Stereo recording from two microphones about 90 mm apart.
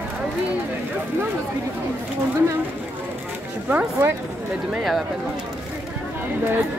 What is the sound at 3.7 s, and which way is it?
Speech, 25° right (ahead or behind).